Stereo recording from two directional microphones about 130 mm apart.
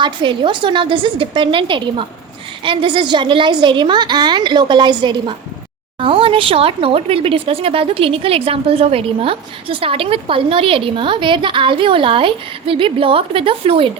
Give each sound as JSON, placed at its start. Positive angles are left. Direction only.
{"t": 0.0, "sound": "a woman's voice", "side_deg": -40}